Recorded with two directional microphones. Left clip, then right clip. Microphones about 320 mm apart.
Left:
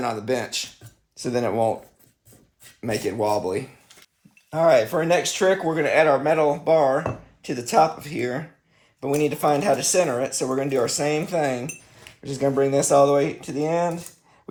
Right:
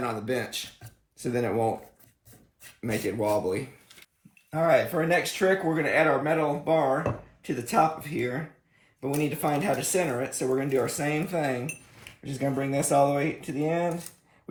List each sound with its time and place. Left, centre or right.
0.0 s speech: centre
2.8 s speech: centre